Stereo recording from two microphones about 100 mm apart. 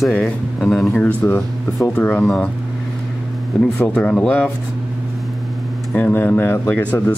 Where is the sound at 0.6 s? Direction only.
Centre (ahead or behind).